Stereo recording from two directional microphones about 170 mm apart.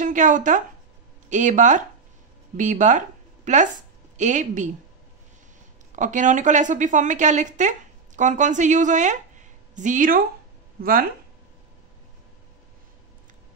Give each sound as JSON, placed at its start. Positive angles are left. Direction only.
{"t": 0.0, "sound": "a woman's voice", "side_deg": -50}
{"t": 5.9, "sound": "a woman's voice", "side_deg": -45}